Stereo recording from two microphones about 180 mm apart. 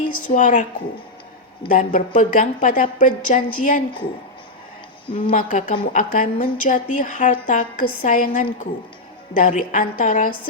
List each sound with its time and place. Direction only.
0.2 s a woman's voice: 45° left (ahead or behind)
5.3 s a woman's voice: 45° left (ahead or behind)